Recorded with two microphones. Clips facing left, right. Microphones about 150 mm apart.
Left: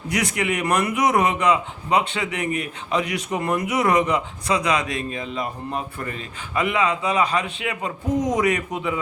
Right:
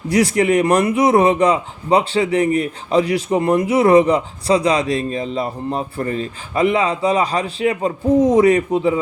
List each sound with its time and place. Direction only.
0.1 s a man's voice: 35° right (ahead or behind)